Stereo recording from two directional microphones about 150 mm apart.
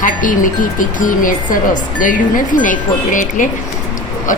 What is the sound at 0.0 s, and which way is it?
Speech, 60° left (ahead or behind).